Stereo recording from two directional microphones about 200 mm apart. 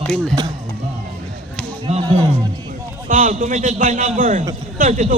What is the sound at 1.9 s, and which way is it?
Speech, 35° right (ahead or behind).